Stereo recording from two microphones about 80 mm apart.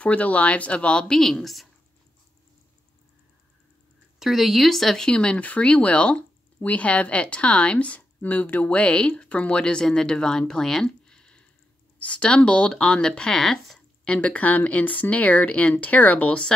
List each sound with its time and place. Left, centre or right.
0.0 s speech: centre
4.2 s speech: centre